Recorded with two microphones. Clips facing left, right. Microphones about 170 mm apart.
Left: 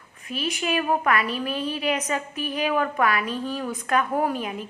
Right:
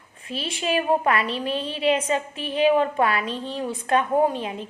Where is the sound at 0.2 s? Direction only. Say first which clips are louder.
Left 1 dB; 30° right (ahead or behind).